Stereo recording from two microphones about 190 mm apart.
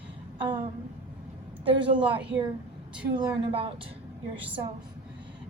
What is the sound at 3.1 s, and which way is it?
Speech, 30° right (ahead or behind).